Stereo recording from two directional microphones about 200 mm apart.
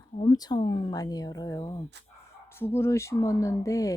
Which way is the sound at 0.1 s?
25° left (ahead or behind).